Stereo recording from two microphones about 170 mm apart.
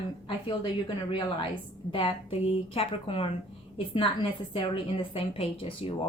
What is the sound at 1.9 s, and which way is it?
A woman's voice, 30° left (ahead or behind).